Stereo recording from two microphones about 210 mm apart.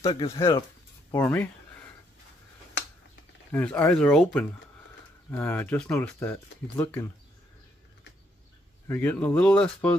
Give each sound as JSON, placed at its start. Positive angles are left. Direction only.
{"t": 0.0, "sound": "speech", "side_deg": 20}
{"t": 1.1, "sound": "a sound", "side_deg": 10}
{"t": 3.5, "sound": "speech", "side_deg": 5}
{"t": 8.8, "sound": "speech", "side_deg": 10}